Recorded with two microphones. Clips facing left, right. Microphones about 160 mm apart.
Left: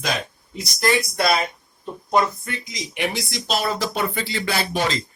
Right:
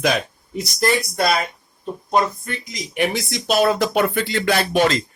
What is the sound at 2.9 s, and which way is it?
Speech, 55° right (ahead or behind).